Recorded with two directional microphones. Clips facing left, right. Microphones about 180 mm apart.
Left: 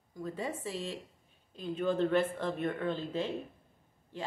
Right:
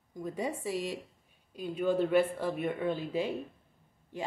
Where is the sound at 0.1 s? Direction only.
15° right (ahead or behind).